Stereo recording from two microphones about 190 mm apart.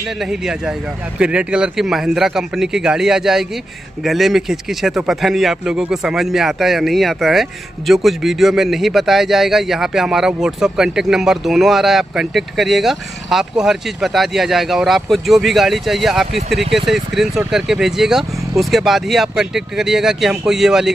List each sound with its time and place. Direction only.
0.2 s speech: 5° right (ahead or behind)